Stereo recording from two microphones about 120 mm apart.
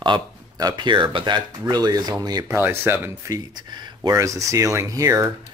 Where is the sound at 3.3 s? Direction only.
35° right (ahead or behind).